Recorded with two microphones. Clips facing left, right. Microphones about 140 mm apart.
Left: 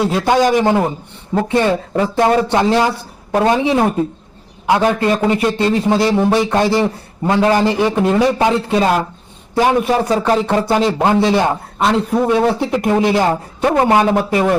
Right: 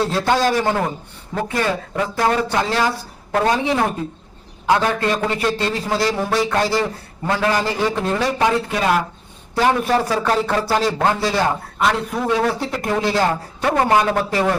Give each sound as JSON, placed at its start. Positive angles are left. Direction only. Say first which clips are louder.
{"t": 0.0, "sound": "a man's voice", "louder": "left 4 dB", "side_deg": 15}